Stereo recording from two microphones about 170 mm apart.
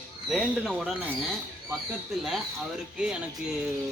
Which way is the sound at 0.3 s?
Centre (ahead or behind).